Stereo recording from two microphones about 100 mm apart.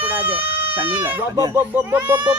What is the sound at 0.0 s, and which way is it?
Baby cry, 20° right (ahead or behind).